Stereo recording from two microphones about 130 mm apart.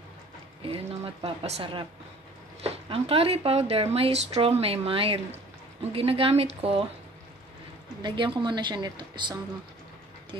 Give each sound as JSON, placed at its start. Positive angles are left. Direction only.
{"t": 0.6, "sound": "speech", "side_deg": -45}
{"t": 8.0, "sound": "a woman's voice", "side_deg": -40}